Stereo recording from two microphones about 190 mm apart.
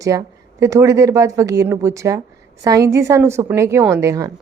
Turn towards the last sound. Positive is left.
turn(degrees=-15)  # may be behind; listen again after turning